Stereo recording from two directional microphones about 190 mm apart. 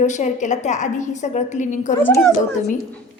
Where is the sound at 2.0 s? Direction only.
10° left (ahead or behind).